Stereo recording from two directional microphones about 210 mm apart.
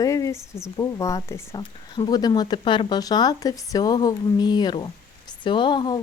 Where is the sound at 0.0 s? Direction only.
15° left (ahead or behind).